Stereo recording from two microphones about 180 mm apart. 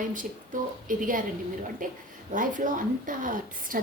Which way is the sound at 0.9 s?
50° right (ahead or behind).